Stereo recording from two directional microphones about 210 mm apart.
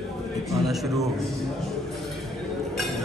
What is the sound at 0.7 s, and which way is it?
Speech, centre (ahead or behind).